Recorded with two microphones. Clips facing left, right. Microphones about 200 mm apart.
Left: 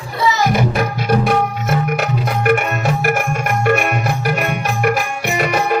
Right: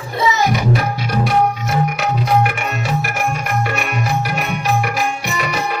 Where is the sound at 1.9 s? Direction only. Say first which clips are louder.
Right 2 dB; 55° left (ahead or behind).